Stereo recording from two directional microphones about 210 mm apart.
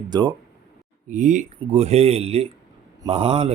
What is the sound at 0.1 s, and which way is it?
Speech, 20° right (ahead or behind).